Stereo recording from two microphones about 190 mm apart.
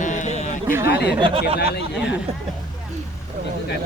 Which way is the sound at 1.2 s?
30° right (ahead or behind).